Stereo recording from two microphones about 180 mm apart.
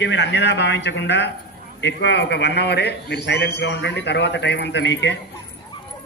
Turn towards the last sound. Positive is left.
turn(degrees=80)